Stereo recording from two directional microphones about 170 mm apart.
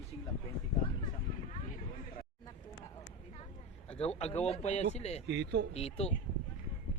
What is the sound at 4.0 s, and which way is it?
A man's voice, 35° left (ahead or behind).